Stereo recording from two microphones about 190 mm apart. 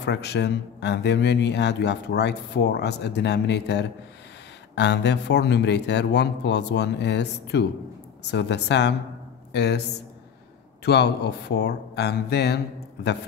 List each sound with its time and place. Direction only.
0.0 s speech: 60° left (ahead or behind)
10.9 s speech: 60° left (ahead or behind)